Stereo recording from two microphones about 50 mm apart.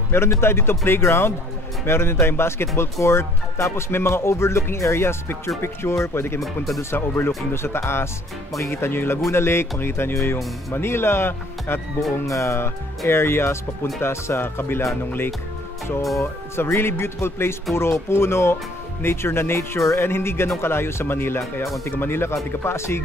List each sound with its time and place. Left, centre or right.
0.1 s speech: left
6.4 s speech: centre
6.8 s speech: left
12.3 s speech: left
13.0 s speech: left
16.2 s speech: left
22.6 s speech: left